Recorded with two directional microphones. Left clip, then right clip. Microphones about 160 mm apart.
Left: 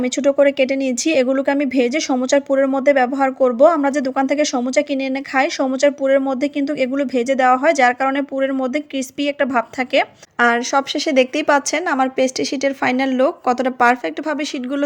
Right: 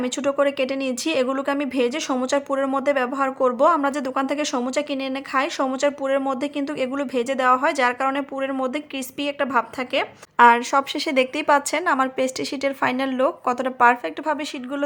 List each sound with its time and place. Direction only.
0.0 s a woman's voice: 15° left (ahead or behind)
10.3 s speech: 10° left (ahead or behind)